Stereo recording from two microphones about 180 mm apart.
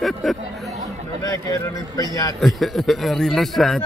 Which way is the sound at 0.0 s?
Centre (ahead or behind).